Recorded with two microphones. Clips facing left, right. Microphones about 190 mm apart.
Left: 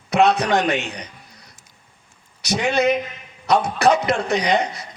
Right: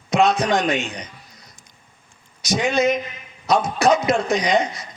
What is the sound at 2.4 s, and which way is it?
A man's voice, 65° left (ahead or behind).